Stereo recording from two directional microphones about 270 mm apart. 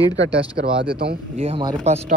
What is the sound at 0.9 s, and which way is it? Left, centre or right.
Speech, right.